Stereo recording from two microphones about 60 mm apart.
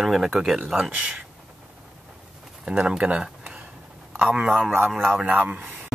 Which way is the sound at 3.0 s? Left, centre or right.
Centre.